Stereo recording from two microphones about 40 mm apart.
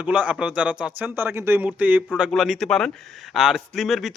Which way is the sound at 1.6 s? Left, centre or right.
Right.